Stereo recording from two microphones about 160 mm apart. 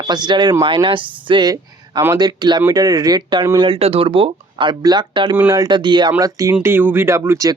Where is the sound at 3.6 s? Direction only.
35° right (ahead or behind).